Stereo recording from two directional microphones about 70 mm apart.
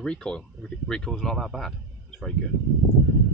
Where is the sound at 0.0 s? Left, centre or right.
Centre.